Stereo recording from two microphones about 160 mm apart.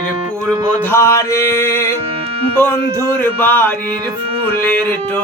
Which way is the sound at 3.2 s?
10° left (ahead or behind).